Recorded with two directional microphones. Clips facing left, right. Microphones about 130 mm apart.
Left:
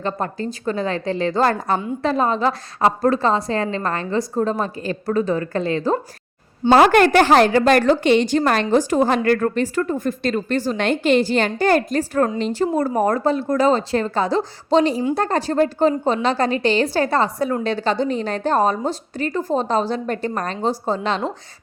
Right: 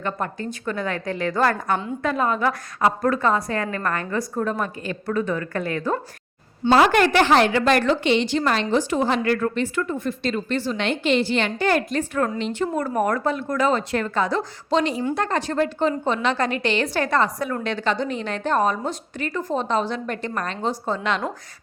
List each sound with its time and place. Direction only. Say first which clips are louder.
0.0 s a woman's voice: left 3 dB; 30° left (ahead or behind)
6.7 s a woman's voice: left 4 dB; 50° left (ahead or behind); by 21.2 s 35° left (ahead or behind)